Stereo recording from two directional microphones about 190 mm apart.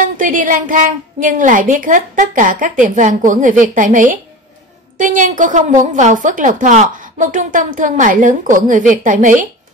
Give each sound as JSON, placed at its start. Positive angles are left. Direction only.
{"t": 0.0, "sound": "a woman's voice", "side_deg": -45}